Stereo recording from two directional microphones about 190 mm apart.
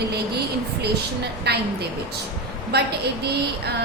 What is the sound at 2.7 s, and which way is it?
Speech, 60° right (ahead or behind).